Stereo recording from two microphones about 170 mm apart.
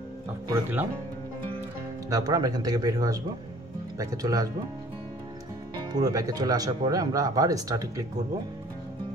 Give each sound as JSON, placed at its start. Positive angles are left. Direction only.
{"t": 0.5, "sound": "speech", "side_deg": -10}
{"t": 2.0, "sound": "speech", "side_deg": -20}
{"t": 5.9, "sound": "speech", "side_deg": -20}